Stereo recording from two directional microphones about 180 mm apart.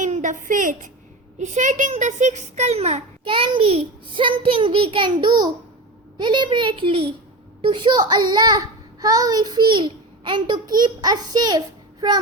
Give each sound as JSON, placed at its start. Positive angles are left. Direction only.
{"t": 0.0, "sound": "a woman's voice", "side_deg": -45}